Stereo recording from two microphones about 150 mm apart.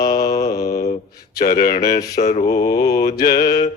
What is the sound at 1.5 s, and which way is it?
Speech, 70° left (ahead or behind).